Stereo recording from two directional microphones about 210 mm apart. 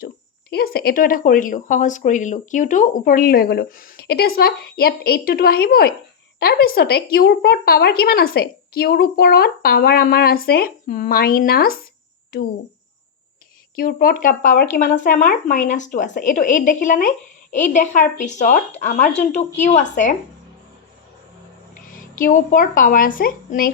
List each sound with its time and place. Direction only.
0.5 s a woman's voice: 45° left (ahead or behind)
13.7 s speech: 40° left (ahead or behind)
21.9 s speech: 40° left (ahead or behind)